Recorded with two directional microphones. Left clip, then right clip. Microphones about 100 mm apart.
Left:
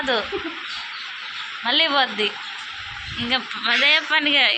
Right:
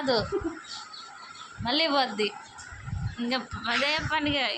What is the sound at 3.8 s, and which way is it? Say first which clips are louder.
Speech: left 10 dB; 5° right (ahead or behind).